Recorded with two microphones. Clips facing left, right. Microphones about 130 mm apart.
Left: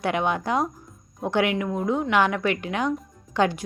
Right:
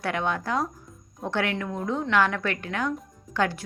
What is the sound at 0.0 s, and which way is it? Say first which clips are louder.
A woman's voice: left 3 dB; 20° left (ahead or behind).